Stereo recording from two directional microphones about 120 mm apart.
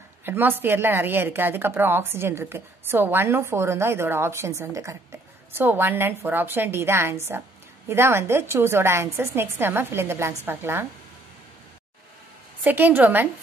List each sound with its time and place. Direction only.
0.2 s a woman's voice: 15° right (ahead or behind)
12.6 s a woman's voice: 15° right (ahead or behind)